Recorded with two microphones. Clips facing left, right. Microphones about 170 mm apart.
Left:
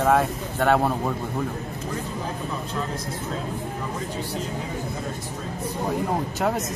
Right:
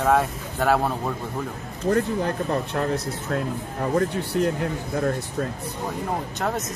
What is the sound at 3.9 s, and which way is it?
Speech, 65° right (ahead or behind).